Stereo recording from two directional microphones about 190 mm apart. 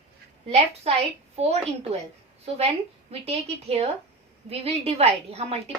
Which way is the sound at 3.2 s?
30° right (ahead or behind).